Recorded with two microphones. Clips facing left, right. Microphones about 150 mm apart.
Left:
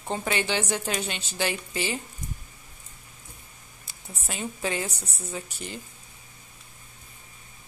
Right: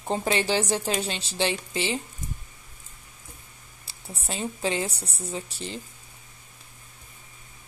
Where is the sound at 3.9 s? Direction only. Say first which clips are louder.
Right 3 dB; 30° right (ahead or behind).